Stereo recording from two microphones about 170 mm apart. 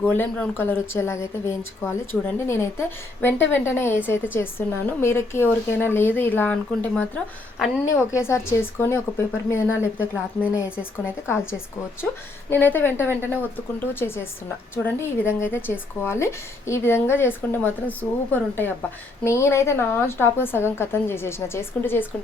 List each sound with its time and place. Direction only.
0.0 s speech: 10° left (ahead or behind)